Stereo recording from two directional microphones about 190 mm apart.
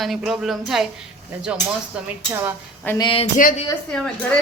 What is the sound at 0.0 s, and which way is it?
Speech, centre (ahead or behind).